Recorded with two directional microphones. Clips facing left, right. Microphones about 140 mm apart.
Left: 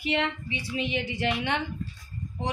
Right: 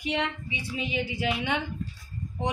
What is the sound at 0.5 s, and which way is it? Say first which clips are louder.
A woman's voice: left 2 dB; 5° right (ahead or behind).